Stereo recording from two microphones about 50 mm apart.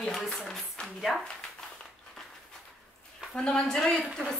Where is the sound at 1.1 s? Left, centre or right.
Centre.